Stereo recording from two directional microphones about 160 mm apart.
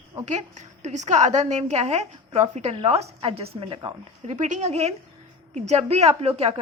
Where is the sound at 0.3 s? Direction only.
45° right (ahead or behind).